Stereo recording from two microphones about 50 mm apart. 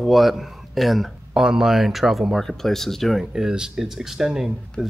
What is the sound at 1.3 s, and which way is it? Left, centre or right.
Speech, centre.